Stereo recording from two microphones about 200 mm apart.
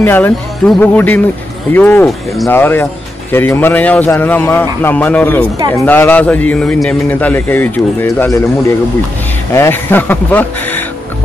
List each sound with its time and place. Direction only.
0.0 s a man's voice: 10° left (ahead or behind)